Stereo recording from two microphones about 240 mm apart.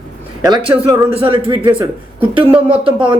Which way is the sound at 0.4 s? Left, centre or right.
Centre.